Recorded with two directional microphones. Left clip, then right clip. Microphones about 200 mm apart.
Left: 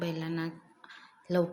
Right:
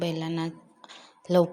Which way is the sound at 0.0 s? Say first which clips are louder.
Right 5 dB; 25° right (ahead or behind).